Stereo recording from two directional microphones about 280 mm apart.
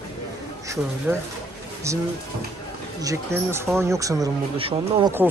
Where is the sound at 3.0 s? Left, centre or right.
Centre.